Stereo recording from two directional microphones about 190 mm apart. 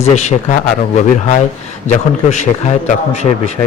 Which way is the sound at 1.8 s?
40° left (ahead or behind).